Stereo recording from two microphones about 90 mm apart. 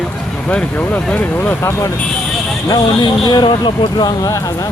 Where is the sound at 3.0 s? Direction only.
55° left (ahead or behind).